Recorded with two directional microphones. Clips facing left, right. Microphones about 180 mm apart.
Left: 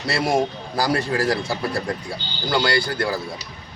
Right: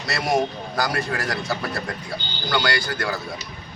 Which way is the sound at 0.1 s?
30° left (ahead or behind).